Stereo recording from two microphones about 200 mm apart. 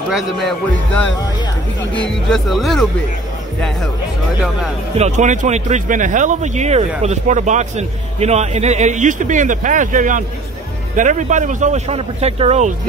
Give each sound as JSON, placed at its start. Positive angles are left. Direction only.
{"t": 0.1, "sound": "speech", "side_deg": 0}
{"t": 2.2, "sound": "speech", "side_deg": 0}
{"t": 4.9, "sound": "a man's voice", "side_deg": -35}